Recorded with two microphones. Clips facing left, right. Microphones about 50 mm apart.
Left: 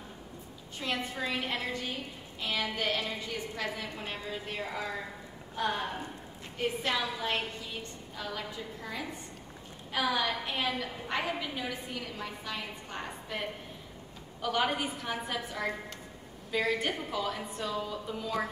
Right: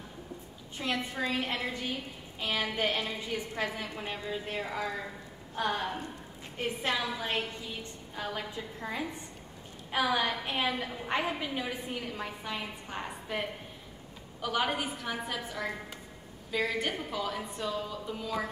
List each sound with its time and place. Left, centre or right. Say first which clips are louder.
0.7 s a woman's voice: right 1 dB; centre
2.5 s a woman's voice: right 1 dB; right
4.0 s a woman's voice: right 2 dB; centre
6.8 s a woman's voice: even; right; by 18.5 s centre